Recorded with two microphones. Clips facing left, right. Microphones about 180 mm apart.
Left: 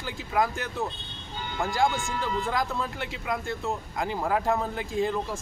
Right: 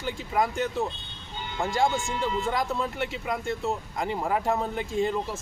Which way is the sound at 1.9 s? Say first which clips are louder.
Right 2 dB; 20° right (ahead or behind).